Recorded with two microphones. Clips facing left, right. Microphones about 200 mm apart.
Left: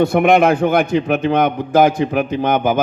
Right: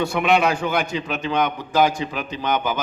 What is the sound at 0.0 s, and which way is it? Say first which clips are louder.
A man's voice: left 7 dB; 55° left (ahead or behind).